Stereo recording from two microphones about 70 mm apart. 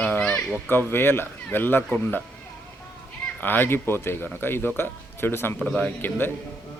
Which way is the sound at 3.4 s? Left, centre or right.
Left.